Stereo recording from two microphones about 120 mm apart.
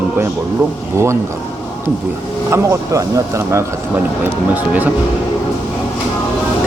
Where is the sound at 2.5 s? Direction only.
25° right (ahead or behind).